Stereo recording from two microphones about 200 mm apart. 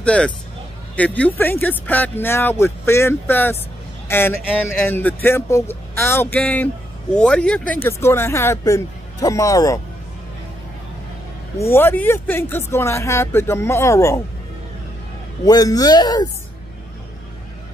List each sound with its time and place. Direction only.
0.0 s speech: 5° left (ahead or behind)
11.5 s speech: 10° left (ahead or behind)
15.4 s a man's voice: 20° left (ahead or behind)